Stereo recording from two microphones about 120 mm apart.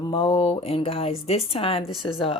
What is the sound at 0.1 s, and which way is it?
Speech, 50° left (ahead or behind).